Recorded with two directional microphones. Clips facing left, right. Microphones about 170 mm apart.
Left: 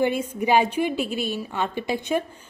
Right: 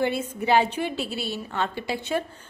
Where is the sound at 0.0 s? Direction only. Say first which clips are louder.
Left 3 dB; 15° left (ahead or behind).